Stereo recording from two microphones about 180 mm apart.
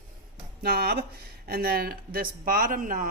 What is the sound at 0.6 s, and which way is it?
Speech, 60° right (ahead or behind).